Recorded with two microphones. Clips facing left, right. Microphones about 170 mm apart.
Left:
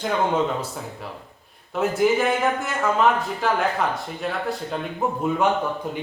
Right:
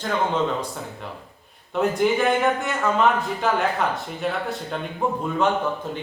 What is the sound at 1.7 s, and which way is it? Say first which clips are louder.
A man's voice: left 1 dB; 5° left (ahead or behind).